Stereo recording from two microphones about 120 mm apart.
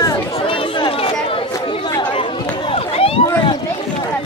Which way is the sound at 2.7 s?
55° left (ahead or behind).